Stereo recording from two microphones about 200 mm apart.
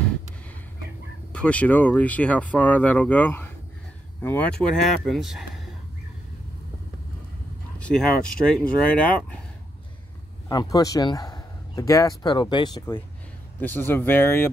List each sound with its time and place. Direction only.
1.3 s speech: 5° left (ahead or behind)
7.9 s speech: 5° right (ahead or behind)
10.5 s speech: 20° left (ahead or behind)
13.6 s speech: 10° left (ahead or behind)